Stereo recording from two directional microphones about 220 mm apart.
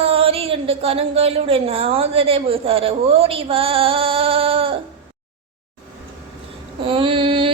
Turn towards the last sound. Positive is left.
turn(degrees=-25)  # may be behind; listen again after turning